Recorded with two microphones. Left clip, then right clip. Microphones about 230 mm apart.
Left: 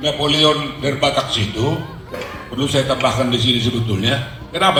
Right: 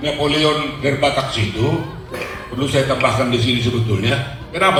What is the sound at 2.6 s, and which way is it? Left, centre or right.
A man's voice, left.